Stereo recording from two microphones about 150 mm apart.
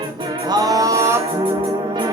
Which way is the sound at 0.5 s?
25° right (ahead or behind).